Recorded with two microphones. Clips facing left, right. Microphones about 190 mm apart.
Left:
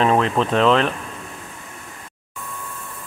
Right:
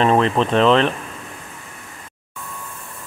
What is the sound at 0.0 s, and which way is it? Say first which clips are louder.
Speech: right 2 dB; centre (ahead or behind).